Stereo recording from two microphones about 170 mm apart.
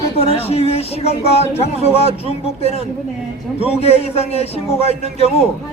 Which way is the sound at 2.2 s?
35° left (ahead or behind).